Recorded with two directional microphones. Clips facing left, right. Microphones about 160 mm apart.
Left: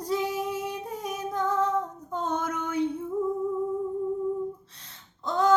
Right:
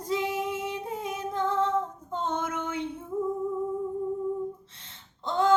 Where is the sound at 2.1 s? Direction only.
25° right (ahead or behind).